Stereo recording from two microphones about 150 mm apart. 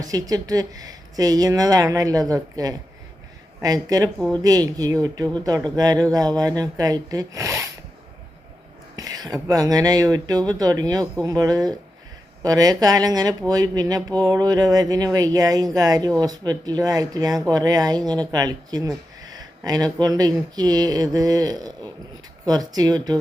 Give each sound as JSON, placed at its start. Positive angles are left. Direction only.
{"t": 0.0, "sound": "speech", "side_deg": -25}
{"t": 9.0, "sound": "speech", "side_deg": -25}